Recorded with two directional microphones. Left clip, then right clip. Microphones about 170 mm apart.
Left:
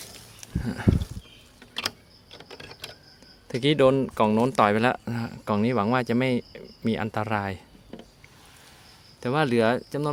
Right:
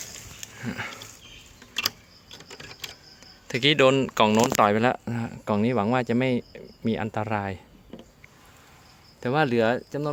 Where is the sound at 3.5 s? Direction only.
15° left (ahead or behind); by 7.6 s centre (ahead or behind).